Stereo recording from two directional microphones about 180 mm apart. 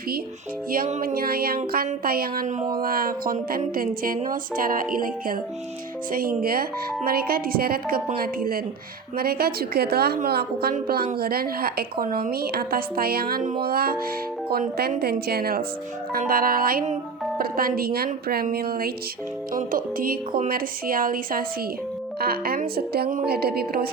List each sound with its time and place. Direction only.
0.7 s a woman's voice: 45° right (ahead or behind)